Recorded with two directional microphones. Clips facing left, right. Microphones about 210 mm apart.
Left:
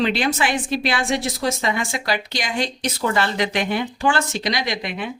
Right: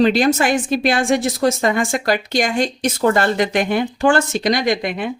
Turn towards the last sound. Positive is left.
turn(degrees=-50)  # may be behind; listen again after turning